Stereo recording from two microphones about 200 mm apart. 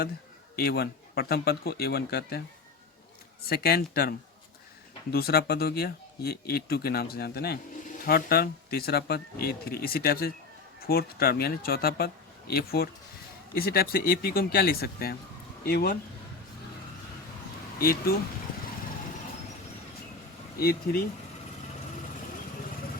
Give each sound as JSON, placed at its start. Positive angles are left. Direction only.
{"t": 0.5, "sound": "speech", "side_deg": 50}
{"t": 3.4, "sound": "speech", "side_deg": 50}
{"t": 5.1, "sound": "speech", "side_deg": 50}
{"t": 17.7, "sound": "speech", "side_deg": 50}
{"t": 20.6, "sound": "speech", "side_deg": 50}